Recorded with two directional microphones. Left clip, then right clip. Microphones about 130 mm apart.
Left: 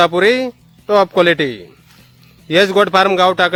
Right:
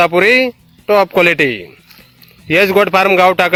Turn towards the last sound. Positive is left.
turn(degrees=-20)  # may be behind; listen again after turning